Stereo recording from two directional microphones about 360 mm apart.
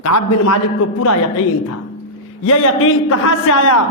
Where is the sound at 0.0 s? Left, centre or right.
Left.